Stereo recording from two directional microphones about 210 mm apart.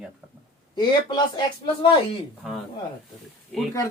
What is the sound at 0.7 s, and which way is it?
Speech, 20° left (ahead or behind).